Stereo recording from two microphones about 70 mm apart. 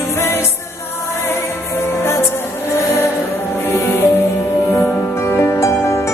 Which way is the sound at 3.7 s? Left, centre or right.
Left.